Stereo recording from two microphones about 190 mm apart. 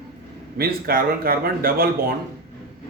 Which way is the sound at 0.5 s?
50° right (ahead or behind).